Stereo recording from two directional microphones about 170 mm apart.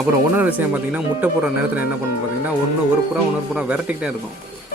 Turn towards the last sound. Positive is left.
turn(degrees=-5)  # may be behind; listen again after turning